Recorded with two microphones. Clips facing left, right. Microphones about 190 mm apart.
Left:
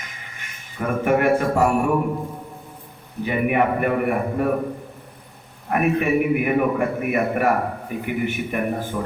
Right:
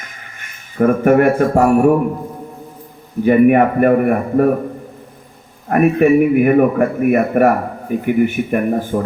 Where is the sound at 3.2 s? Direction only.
50° right (ahead or behind).